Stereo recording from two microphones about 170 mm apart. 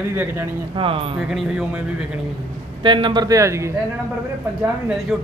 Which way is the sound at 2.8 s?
30° right (ahead or behind).